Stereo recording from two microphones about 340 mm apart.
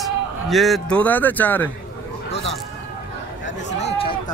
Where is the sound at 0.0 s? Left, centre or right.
Centre.